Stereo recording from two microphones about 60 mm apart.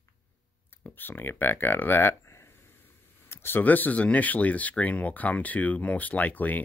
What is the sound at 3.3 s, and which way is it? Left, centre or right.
Speech, left.